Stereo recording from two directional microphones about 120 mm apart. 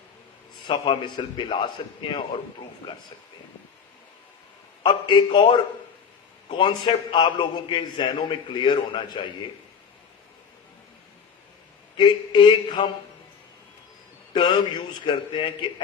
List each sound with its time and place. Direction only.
0.7 s a man's voice: 40° left (ahead or behind)
4.8 s a man's voice: 40° left (ahead or behind)
11.9 s a man's voice: 40° left (ahead or behind)
14.3 s a man's voice: 40° left (ahead or behind)